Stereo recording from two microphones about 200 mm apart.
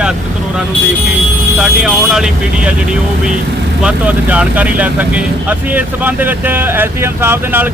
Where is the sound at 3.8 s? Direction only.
5° right (ahead or behind).